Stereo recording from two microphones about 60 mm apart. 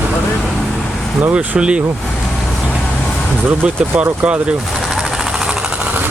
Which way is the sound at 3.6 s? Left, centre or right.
Right.